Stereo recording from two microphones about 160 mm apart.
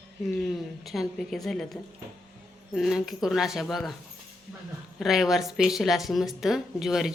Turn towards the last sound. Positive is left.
turn(degrees=0)  # may be behind; listen again after turning